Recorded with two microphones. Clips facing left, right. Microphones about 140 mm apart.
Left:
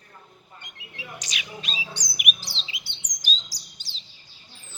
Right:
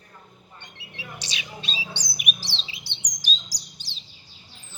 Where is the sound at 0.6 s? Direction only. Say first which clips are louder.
Even; 25° right (ahead or behind).